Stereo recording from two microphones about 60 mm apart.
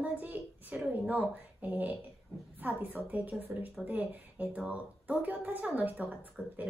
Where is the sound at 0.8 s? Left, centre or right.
Right.